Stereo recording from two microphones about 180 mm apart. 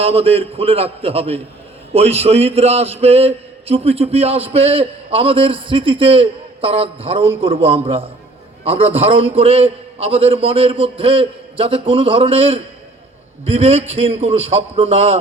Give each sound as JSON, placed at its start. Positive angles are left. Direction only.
{"t": 0.0, "sound": "a man's voice", "side_deg": -35}